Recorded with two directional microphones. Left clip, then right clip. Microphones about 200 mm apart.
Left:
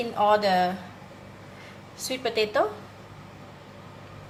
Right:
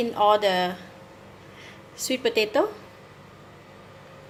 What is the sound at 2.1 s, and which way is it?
Speech, 45° right (ahead or behind).